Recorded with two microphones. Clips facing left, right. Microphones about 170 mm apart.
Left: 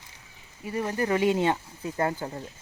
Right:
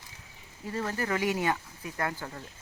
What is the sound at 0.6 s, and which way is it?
Speech, 15° left (ahead or behind).